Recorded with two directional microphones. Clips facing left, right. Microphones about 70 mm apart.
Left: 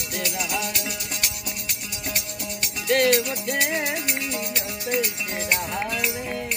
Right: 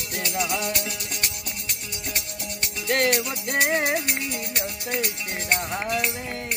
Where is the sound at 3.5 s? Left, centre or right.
Right.